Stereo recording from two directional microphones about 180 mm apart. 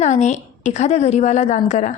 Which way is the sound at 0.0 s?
40° left (ahead or behind).